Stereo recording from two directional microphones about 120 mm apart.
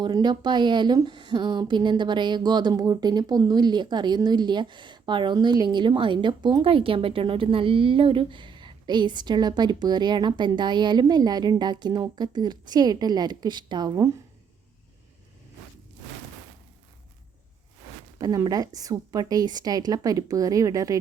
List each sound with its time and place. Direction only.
0.0 s speech: 35° right (ahead or behind)
18.2 s speech: 30° right (ahead or behind)